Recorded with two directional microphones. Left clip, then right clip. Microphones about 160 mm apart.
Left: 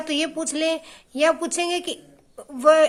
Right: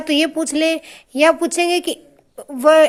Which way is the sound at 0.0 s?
30° right (ahead or behind).